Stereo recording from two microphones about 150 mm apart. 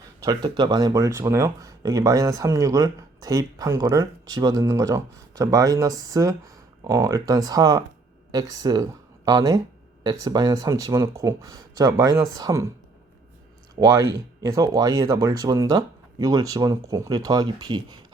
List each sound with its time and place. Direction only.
0.2 s speech: 25° right (ahead or behind)
13.7 s speech: 25° right (ahead or behind)